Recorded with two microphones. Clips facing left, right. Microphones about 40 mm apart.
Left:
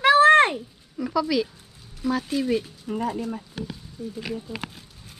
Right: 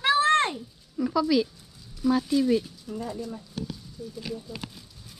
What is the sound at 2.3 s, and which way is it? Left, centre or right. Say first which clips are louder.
Speech: right 1 dB; left.